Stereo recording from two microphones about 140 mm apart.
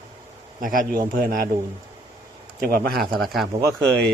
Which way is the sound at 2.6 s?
90° right.